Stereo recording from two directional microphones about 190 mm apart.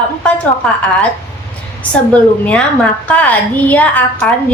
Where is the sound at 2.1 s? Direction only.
5° left (ahead or behind).